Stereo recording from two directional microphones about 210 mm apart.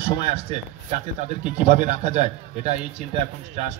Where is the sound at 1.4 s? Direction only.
35° right (ahead or behind).